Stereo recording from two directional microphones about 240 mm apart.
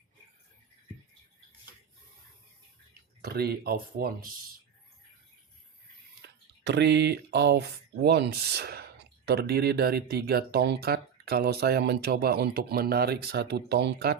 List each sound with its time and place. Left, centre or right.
3.2 s speech: right
6.2 s speech: right